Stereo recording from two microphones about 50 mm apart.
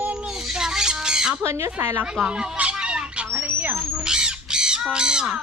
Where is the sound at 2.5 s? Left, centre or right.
Right.